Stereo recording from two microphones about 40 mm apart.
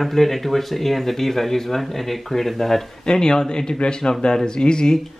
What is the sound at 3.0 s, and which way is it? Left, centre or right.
Speech, centre.